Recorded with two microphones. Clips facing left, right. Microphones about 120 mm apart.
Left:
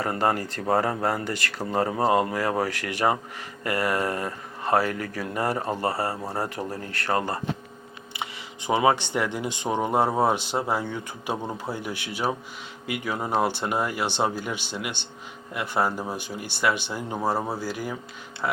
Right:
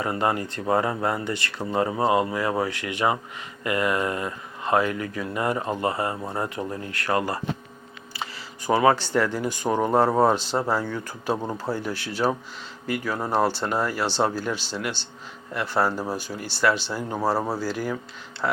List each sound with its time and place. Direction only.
0.0 s speech: 40° left (ahead or behind); by 17.0 s 15° left (ahead or behind)
17.3 s speech: 10° right (ahead or behind)
17.6 s speech: 15° left (ahead or behind)